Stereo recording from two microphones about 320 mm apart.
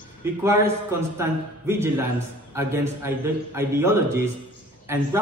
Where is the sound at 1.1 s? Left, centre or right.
Centre.